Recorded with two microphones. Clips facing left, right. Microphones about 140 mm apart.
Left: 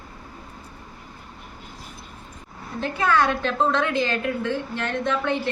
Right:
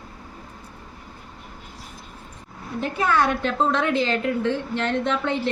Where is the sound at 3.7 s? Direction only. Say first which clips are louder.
Right 1 dB; 20° right (ahead or behind).